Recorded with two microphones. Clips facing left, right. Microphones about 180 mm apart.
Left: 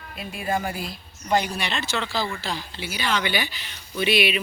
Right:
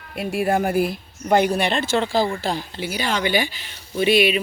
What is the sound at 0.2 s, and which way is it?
Speech, 65° right (ahead or behind).